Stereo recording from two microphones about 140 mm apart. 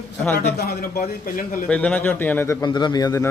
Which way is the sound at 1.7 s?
10° left (ahead or behind).